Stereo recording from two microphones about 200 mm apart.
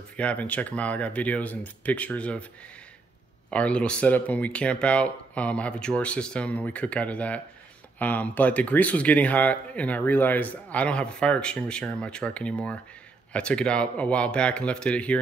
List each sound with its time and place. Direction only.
0.2 s speech: 5° left (ahead or behind)
3.4 s speech: 5° left (ahead or behind)